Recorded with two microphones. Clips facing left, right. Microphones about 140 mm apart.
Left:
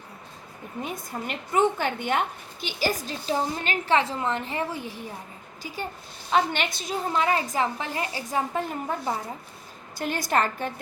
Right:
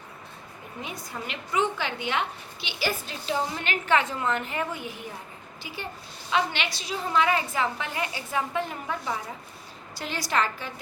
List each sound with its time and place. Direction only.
0.8 s a woman's voice: 45° left (ahead or behind)
6.3 s a woman's voice: 50° left (ahead or behind)
7.1 s a woman's voice: 35° left (ahead or behind)
10.0 s a woman's voice: 50° left (ahead or behind)